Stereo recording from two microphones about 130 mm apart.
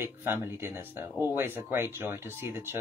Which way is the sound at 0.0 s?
20° right (ahead or behind).